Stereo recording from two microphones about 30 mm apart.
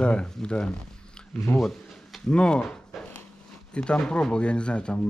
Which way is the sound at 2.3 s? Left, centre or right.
Left.